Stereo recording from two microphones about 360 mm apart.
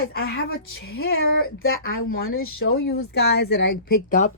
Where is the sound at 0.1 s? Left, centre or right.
Left.